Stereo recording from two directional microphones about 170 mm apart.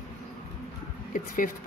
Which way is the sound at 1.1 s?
55° left (ahead or behind).